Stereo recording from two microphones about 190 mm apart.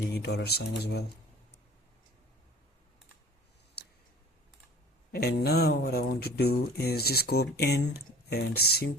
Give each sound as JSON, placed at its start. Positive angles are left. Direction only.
{"t": 0.2, "sound": "speech", "side_deg": 60}
{"t": 5.1, "sound": "speech", "side_deg": 55}